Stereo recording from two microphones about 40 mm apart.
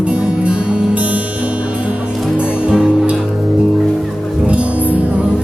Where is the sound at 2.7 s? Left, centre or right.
Right.